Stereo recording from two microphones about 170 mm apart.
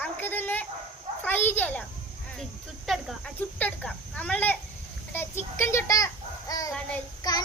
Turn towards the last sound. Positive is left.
turn(degrees=20)  # may be behind; listen again after turning